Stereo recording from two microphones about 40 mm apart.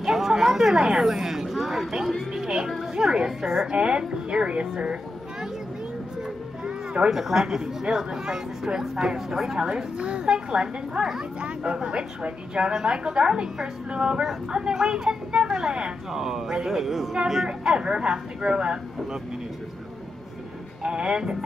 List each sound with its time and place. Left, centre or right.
0.0 s speech: centre
3.6 s a woman's voice: right
6.6 s music: right
7.1 s speech: centre
9.6 s a woman's voice: centre
16.1 s speech: centre
17.5 s a woman's voice: centre
20.8 s a woman's voice: right